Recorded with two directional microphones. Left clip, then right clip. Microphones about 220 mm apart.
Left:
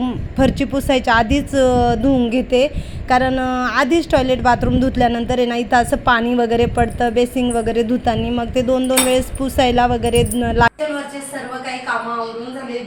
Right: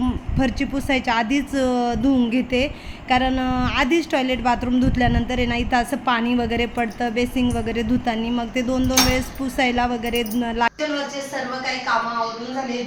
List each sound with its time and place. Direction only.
0.0 s a woman's voice: 15° left (ahead or behind)